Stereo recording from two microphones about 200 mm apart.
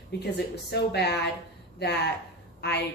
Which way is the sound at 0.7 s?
55° left (ahead or behind).